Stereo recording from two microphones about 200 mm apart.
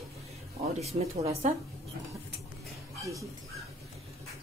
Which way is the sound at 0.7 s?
30° right (ahead or behind).